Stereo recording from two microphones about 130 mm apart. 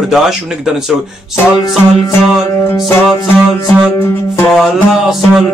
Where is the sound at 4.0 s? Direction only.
15° left (ahead or behind).